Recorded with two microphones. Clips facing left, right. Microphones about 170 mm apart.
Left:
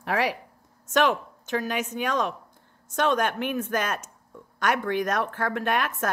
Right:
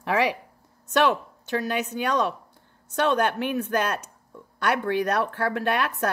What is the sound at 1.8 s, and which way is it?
A woman's voice, 35° right (ahead or behind).